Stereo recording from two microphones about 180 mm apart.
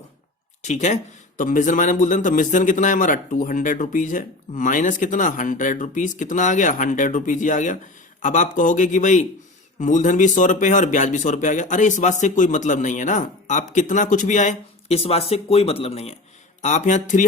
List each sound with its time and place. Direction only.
0.6 s a man's voice: 40° left (ahead or behind)